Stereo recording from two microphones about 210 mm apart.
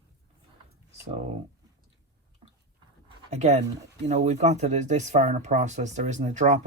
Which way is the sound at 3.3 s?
30° right (ahead or behind).